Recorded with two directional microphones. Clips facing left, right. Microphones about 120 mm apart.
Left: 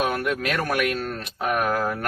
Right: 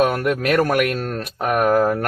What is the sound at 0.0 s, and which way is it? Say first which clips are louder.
Speech: right 6 dB; 45° right (ahead or behind).